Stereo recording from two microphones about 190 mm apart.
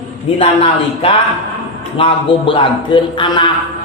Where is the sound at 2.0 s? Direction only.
25° left (ahead or behind).